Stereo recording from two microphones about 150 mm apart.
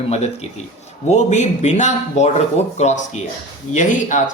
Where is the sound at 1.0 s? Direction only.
50° left (ahead or behind).